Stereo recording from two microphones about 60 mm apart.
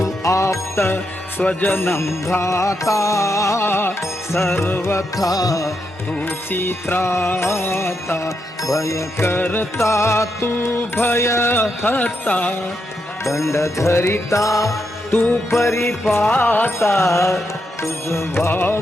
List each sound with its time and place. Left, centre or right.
0.0 s jingle bell: left
1.4 s music: left
3.7 s music: left
6.2 s music: left
8.6 s music: left
9.4 s music: left
9.7 s music: left
13.3 s music: left
15.1 s music: left
15.5 s music: left
16.3 s music: left
16.8 s music: left